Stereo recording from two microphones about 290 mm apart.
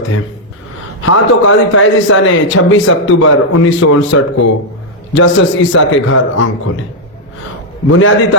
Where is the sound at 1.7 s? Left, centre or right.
Left.